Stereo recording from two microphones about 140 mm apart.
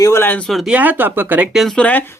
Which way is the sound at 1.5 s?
5° left (ahead or behind).